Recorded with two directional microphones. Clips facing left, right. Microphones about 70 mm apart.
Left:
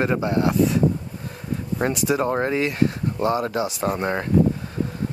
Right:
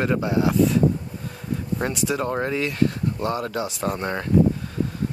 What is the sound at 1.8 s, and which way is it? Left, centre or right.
Speech, centre.